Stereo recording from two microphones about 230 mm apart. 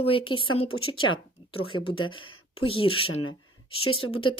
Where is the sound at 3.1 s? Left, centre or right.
Left.